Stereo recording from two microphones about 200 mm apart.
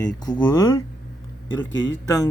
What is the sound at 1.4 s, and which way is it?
Speech, 70° left (ahead or behind).